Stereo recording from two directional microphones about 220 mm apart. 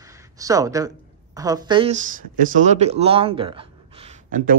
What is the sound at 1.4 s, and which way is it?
Speech, 15° right (ahead or behind).